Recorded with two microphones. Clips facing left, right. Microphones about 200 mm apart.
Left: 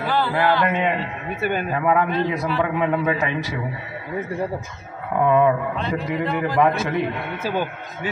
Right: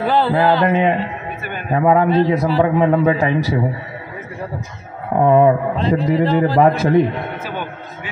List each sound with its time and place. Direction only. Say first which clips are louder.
0.0 s mantra: right 5 dB; 30° right (ahead or behind)
1.7 s a man's voice: right 9 dB; 30° right (ahead or behind)
5.1 s a man's voice: right 5 dB; 35° right (ahead or behind)